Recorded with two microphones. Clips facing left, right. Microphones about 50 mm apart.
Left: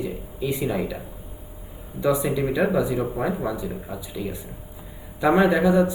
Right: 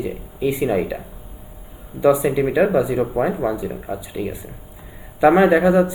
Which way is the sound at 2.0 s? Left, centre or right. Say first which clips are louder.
Right 6 dB; centre.